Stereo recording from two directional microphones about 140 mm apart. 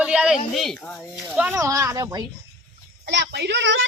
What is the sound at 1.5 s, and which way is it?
Speech, 20° right (ahead or behind).